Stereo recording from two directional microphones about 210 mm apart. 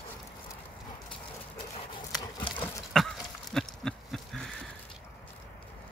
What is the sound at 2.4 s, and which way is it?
Horse, 25° left (ahead or behind).